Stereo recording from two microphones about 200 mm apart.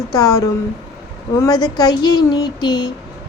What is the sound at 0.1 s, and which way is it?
A woman's voice, 20° left (ahead or behind).